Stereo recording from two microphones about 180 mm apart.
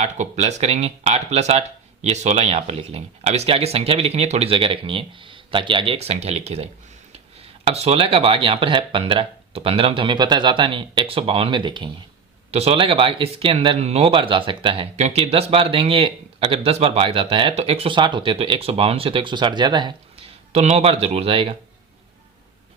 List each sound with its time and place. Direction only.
0.0 s speech: 40° right (ahead or behind)